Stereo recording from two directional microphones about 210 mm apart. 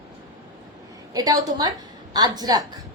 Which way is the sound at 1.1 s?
20° right (ahead or behind).